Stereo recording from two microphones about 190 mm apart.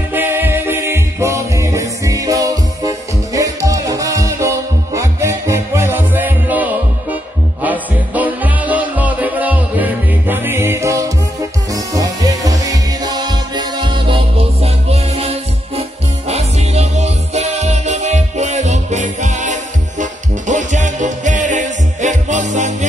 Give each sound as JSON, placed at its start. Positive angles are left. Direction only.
{"t": 0.1, "sound": "music", "side_deg": -10}